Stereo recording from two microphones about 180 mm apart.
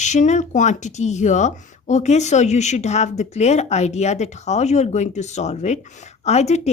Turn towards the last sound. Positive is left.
turn(degrees=40)  # may be behind; listen again after turning